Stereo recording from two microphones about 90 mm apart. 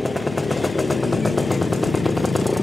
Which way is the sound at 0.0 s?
Centre (ahead or behind).